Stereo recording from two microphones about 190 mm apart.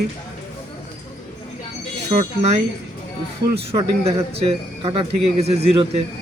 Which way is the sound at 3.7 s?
15° right (ahead or behind).